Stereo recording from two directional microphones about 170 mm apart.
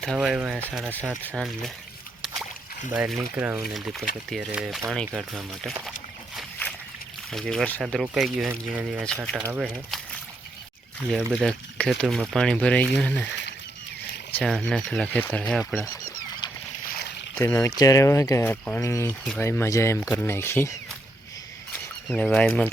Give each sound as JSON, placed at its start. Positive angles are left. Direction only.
{"t": 0.0, "sound": "speech", "side_deg": 0}
{"t": 2.9, "sound": "speech", "side_deg": -5}
{"t": 3.8, "sound": "speech", "side_deg": 0}
{"t": 7.3, "sound": "speech", "side_deg": 0}
{"t": 11.3, "sound": "speech", "side_deg": 5}
{"t": 14.3, "sound": "speech", "side_deg": 5}
{"t": 16.9, "sound": "boat", "side_deg": 75}
{"t": 17.4, "sound": "speech", "side_deg": 20}
{"t": 22.1, "sound": "speech", "side_deg": 10}